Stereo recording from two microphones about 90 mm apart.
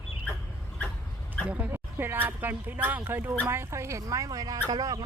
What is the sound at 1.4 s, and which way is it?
Speech, 15° right (ahead or behind).